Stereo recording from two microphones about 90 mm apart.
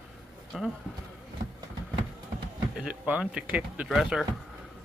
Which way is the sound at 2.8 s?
15° right (ahead or behind).